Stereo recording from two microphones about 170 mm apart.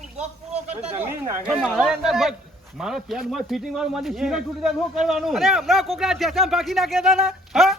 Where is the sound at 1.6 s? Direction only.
Centre (ahead or behind).